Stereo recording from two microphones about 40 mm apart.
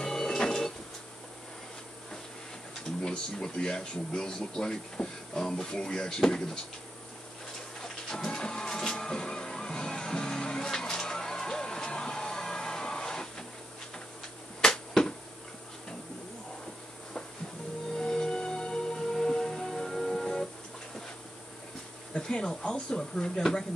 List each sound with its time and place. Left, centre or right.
0.0 s printer: centre
2.7 s speech: centre
7.8 s printer: centre
14.6 s finger snapping: centre
17.9 s music: centre
22.2 s a sound: centre
22.7 s speech: left